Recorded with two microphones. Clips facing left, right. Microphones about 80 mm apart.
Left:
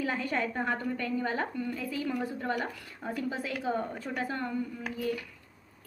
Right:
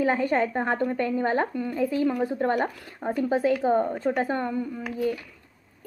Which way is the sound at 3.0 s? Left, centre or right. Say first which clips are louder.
Right 10 dB; right.